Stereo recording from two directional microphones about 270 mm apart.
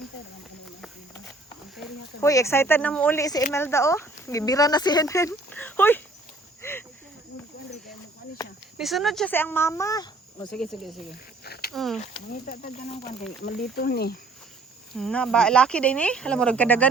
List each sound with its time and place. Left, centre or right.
2.2 s speech: centre
6.6 s cricket: centre
8.4 s a sound: centre
8.8 s speech: centre
10.5 s speech: centre
11.4 s a sound: left
11.7 s speech: centre
12.0 s speech: left
14.9 s speech: centre